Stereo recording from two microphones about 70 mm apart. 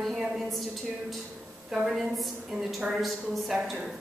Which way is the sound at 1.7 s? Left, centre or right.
Centre.